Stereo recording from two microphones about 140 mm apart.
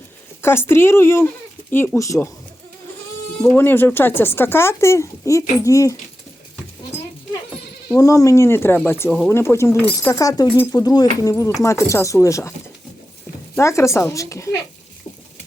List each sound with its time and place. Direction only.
0.4 s speech: 15° left (ahead or behind)
3.5 s speech: 15° left (ahead or behind)
7.9 s speech: 25° left (ahead or behind)
13.6 s speech: 20° left (ahead or behind)